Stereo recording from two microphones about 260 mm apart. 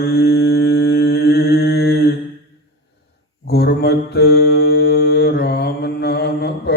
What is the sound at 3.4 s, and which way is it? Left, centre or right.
Mantra, left.